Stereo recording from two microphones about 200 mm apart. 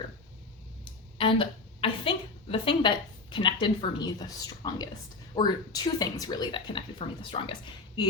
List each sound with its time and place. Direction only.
1.2 s a woman's voice: 25° left (ahead or behind)